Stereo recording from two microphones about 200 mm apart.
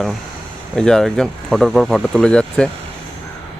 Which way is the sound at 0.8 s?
5° left (ahead or behind).